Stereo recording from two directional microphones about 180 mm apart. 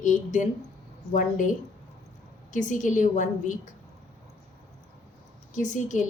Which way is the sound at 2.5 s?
45° left (ahead or behind).